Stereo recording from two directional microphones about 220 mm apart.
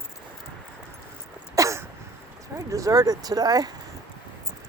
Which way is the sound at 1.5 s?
15° right (ahead or behind).